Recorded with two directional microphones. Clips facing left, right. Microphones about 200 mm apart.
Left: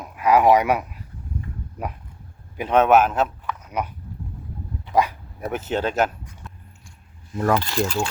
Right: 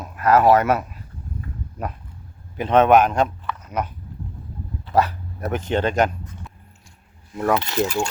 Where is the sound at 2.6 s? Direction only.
10° left (ahead or behind).